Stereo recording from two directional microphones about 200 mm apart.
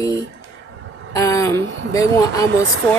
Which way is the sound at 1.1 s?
15° left (ahead or behind).